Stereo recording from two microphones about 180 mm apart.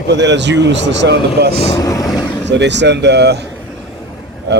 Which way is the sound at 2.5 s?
75° right (ahead or behind).